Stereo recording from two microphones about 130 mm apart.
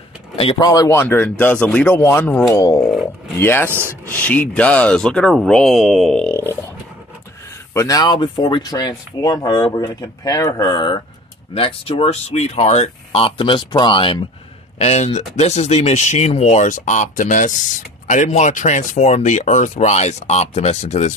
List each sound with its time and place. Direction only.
0.6 s speech: 30° left (ahead or behind)
7.7 s speech: 25° left (ahead or behind)
11.5 s speech: 45° left (ahead or behind)
14.8 s speech: 55° left (ahead or behind)